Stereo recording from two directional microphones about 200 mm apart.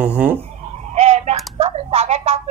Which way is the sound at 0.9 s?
35° right (ahead or behind).